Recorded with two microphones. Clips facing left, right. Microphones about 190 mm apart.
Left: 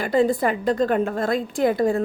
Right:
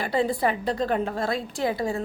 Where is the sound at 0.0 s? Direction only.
45° left (ahead or behind).